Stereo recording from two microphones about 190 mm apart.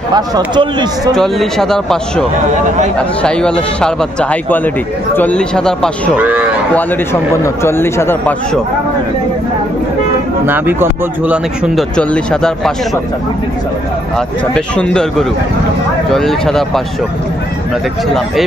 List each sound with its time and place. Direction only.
0.6 s speech: 25° right (ahead or behind)
1.1 s speech: centre (ahead or behind)
6.1 s speech: 10° right (ahead or behind)
7.4 s speech: 15° left (ahead or behind)
10.4 s speech: 10° right (ahead or behind)
12.0 s speech: 5° left (ahead or behind)
14.1 s speech: 5° left (ahead or behind)